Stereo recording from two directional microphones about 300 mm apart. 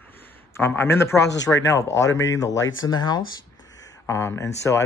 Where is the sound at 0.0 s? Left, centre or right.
Centre.